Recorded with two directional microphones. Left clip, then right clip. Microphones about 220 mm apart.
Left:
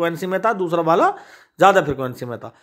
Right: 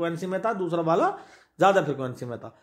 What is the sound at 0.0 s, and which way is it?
Speech, 30° left (ahead or behind).